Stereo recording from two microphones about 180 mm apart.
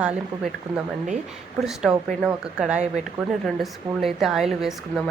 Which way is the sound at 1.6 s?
5° right (ahead or behind).